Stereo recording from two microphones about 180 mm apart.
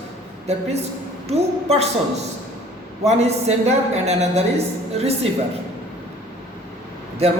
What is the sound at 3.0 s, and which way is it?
A man's voice, 35° right (ahead or behind).